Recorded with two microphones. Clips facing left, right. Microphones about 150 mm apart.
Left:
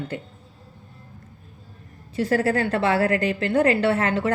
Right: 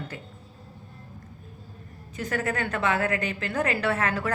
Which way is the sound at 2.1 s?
30° left (ahead or behind).